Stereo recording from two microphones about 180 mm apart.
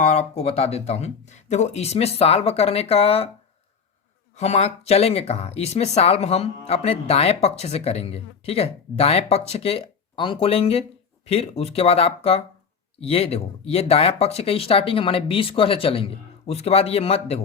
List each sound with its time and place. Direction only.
0.0 s speech: 40° left (ahead or behind)
4.4 s speech: 35° left (ahead or behind)